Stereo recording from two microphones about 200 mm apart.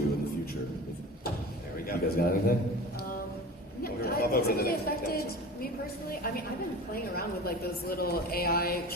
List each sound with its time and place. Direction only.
1.9 s a man's voice: 45° left (ahead or behind)
3.8 s a woman's voice: 50° left (ahead or behind)